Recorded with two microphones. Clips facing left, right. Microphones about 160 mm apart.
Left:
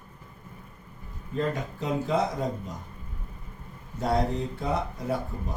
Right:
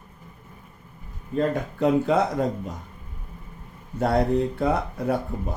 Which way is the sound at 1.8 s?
60° right (ahead or behind).